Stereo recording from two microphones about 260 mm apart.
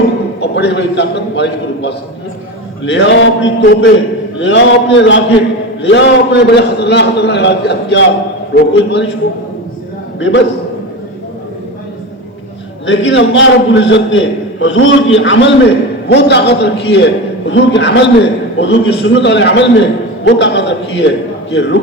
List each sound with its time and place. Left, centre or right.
0.3 s a man's voice: left
10.2 s a man's voice: left
12.8 s a man's voice: left